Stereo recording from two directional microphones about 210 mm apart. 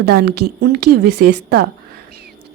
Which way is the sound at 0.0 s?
50° right (ahead or behind).